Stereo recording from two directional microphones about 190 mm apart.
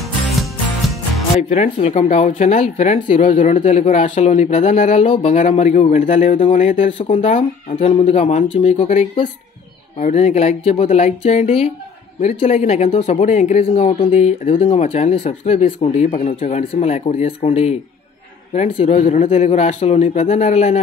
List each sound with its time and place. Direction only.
1.5 s speech: 35° left (ahead or behind)